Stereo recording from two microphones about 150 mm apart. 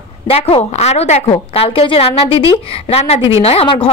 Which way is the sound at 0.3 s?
40° left (ahead or behind).